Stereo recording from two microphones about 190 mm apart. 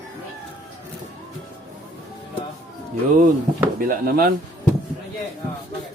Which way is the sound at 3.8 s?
50° right (ahead or behind).